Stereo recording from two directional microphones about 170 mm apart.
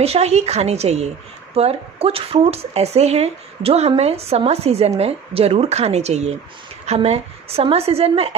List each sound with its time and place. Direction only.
0.0 s a woman's voice: 40° right (ahead or behind)